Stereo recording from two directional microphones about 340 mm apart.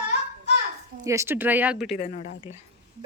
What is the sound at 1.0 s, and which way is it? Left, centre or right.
Speech, centre.